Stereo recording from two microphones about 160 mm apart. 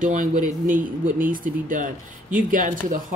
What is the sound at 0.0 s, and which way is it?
Speech, 55° right (ahead or behind).